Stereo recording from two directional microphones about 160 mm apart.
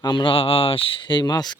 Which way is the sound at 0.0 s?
30° left (ahead or behind).